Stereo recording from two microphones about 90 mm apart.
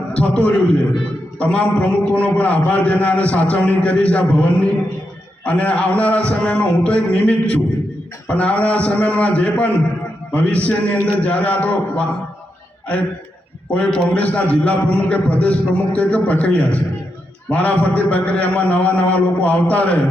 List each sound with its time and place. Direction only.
0.1 s a man's voice: 15° left (ahead or behind)
13.7 s a man's voice: 15° left (ahead or behind)